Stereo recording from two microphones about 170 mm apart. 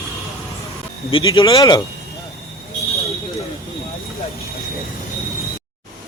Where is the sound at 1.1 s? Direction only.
30° left (ahead or behind).